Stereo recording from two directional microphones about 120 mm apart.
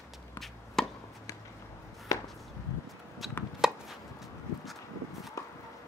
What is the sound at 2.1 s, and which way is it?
Chop, 25° left (ahead or behind).